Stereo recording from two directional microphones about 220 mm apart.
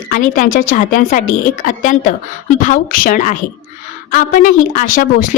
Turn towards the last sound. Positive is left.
turn(degrees=35)  # may be behind; listen again after turning